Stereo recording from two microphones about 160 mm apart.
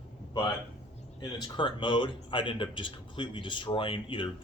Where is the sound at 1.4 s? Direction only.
30° left (ahead or behind).